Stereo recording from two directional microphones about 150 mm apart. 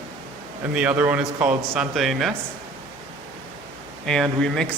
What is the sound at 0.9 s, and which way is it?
Speech, 10° right (ahead or behind).